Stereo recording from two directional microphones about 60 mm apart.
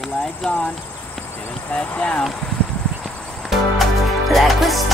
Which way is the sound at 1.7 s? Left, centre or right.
Left.